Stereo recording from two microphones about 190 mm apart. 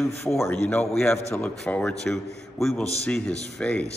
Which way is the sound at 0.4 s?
10° left (ahead or behind).